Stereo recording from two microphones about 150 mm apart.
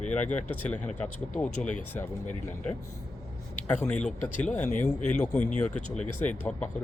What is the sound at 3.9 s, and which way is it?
Speech, 55° left (ahead or behind).